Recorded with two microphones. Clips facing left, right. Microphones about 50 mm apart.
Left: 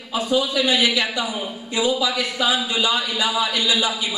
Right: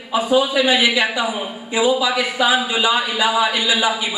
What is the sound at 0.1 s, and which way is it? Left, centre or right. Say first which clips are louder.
A man's voice: right 4 dB; centre.